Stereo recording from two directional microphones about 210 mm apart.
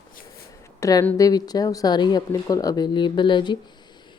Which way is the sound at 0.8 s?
15° left (ahead or behind).